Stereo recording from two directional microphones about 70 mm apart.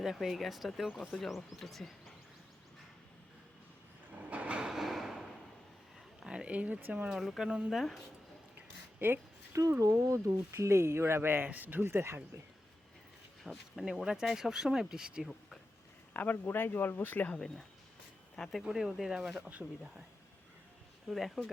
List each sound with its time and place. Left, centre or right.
0.0 s speech: centre
4.2 s train: right; by 5.2 s centre
6.2 s speech: centre
7.1 s speech: centre
8.5 s a sound: right
9.5 s speech: right
13.4 s speech: centre
16.1 s speech: left
18.3 s speech: centre
19.4 s speech: right
21.1 s speech: centre